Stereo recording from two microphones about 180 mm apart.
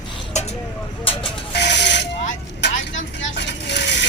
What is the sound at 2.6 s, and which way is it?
Vehicle, 70° left (ahead or behind).